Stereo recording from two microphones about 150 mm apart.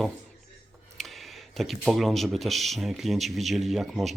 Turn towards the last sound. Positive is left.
turn(degrees=0)  # may be behind; listen again after turning